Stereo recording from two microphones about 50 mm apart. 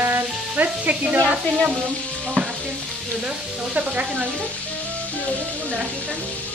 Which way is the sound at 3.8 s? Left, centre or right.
Right.